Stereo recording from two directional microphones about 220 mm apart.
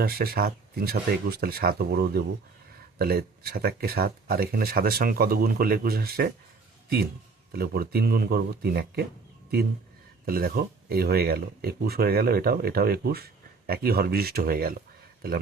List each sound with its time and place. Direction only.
0.0 s speech: 45° right (ahead or behind)
7.5 s speech: 45° right (ahead or behind)
10.2 s speech: 40° right (ahead or behind)